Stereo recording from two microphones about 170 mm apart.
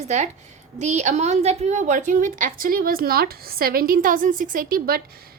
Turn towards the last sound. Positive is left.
turn(degrees=-60)  # may be behind; listen again after turning